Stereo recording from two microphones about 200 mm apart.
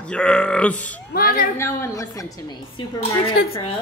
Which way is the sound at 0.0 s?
5° left (ahead or behind).